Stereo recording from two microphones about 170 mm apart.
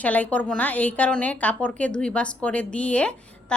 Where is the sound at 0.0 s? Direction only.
10° left (ahead or behind).